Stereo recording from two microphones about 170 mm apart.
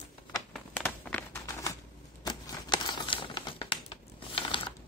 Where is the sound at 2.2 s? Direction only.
20° left (ahead or behind).